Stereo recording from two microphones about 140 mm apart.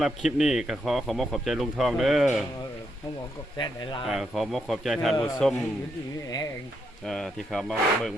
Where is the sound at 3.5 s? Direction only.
30° left (ahead or behind).